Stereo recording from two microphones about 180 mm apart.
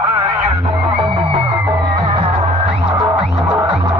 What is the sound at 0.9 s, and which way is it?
Music, 30° right (ahead or behind).